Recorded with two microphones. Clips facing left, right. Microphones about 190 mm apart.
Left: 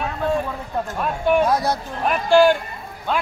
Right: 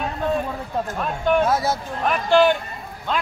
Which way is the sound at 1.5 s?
5° right (ahead or behind).